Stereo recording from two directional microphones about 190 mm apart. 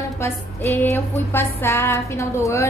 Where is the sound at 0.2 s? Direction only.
15° left (ahead or behind).